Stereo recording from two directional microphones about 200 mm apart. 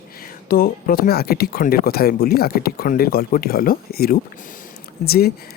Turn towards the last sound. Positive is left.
turn(degrees=50)  # may be behind; listen again after turning